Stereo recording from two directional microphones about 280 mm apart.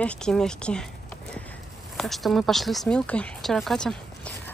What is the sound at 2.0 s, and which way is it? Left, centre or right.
Speech, centre.